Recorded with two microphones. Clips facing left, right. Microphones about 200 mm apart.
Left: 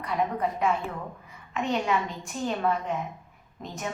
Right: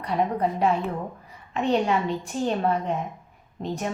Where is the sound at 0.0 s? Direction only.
35° right (ahead or behind).